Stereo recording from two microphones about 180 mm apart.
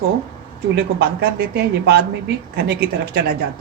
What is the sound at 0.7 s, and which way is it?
Speech, 70° right (ahead or behind).